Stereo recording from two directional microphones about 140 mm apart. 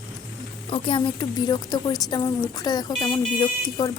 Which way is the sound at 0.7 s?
35° left (ahead or behind).